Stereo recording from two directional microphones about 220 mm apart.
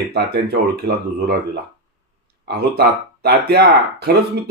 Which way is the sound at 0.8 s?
45° right (ahead or behind).